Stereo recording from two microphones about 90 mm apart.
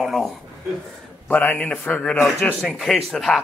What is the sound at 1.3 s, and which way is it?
Speech, 20° left (ahead or behind).